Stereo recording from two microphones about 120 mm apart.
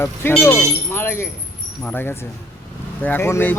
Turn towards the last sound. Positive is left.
turn(degrees=20)  # may be behind; listen again after turning